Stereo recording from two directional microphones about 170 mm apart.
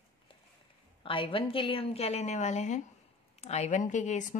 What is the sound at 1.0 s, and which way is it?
A woman's voice, 30° left (ahead or behind).